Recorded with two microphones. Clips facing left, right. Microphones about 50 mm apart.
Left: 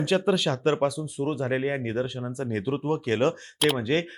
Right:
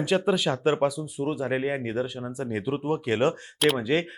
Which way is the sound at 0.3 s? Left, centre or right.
Centre.